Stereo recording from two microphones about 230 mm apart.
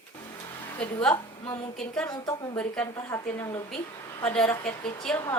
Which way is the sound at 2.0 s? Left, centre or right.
Centre.